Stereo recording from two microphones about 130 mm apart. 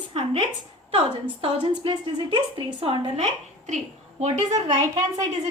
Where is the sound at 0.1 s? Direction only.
50° right (ahead or behind).